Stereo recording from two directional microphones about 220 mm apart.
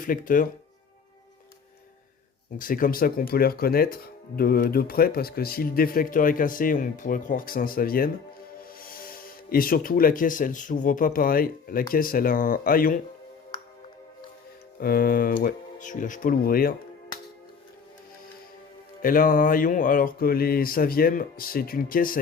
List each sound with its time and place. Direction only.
0.0 s speech: 35° left (ahead or behind)
2.6 s speech: 40° left (ahead or behind)
14.8 s speech: 45° left (ahead or behind)
19.0 s speech: 40° left (ahead or behind)